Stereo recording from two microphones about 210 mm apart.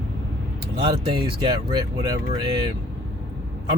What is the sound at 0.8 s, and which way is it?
Speech, 25° right (ahead or behind).